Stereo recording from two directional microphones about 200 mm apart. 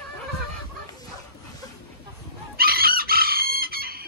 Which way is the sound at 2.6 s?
50° right (ahead or behind).